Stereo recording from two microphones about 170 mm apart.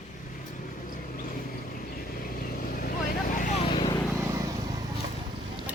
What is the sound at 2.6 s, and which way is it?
Vehicle, 60° left (ahead or behind).